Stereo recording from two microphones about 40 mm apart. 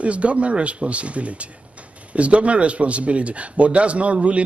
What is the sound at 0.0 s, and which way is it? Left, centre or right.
Speech, right.